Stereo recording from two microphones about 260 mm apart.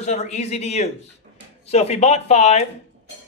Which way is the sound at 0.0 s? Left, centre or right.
Left.